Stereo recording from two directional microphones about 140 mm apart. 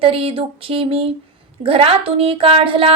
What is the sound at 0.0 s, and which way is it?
Speech, 40° right (ahead or behind).